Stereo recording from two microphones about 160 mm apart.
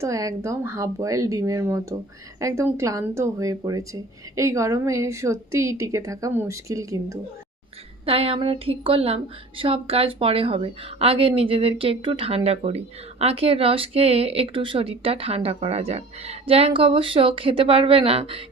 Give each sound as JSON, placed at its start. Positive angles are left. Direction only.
{"t": 0.0, "sound": "speech", "side_deg": -20}
{"t": 8.0, "sound": "a woman's voice", "side_deg": -35}